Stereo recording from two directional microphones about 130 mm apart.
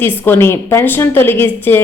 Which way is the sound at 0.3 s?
20° left (ahead or behind).